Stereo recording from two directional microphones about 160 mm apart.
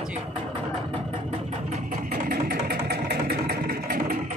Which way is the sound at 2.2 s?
70° right (ahead or behind).